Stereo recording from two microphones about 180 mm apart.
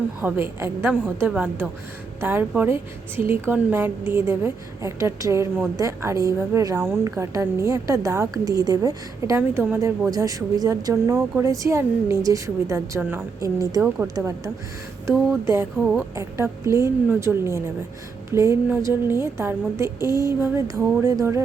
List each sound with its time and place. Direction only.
0.2 s a woman's voice: 10° right (ahead or behind)